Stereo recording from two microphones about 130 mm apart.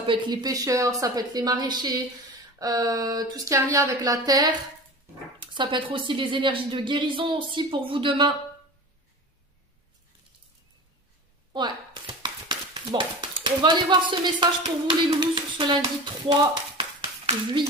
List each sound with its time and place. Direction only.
0.0 s a woman's voice: 40° right (ahead or behind)
5.5 s a woman's voice: 40° right (ahead or behind)
11.5 s speech: 35° right (ahead or behind)
16.3 s a sound: 40° right (ahead or behind)